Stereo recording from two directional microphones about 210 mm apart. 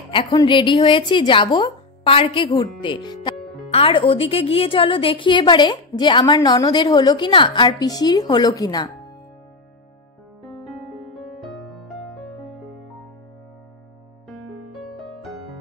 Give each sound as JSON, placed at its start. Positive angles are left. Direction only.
{"t": 0.1, "sound": "speech", "side_deg": 25}
{"t": 11.1, "sound": "music", "side_deg": 0}